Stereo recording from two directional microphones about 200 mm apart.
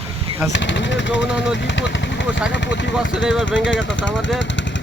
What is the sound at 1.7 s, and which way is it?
Speech, 65° left (ahead or behind).